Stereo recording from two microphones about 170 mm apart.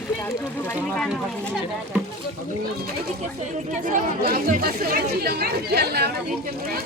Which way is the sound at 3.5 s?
50° right (ahead or behind).